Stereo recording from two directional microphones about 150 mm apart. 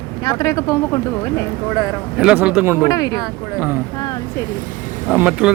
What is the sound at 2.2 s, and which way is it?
Speech, 5° right (ahead or behind).